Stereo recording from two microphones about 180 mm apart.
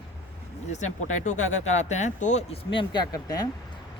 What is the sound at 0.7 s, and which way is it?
Speech, 40° left (ahead or behind).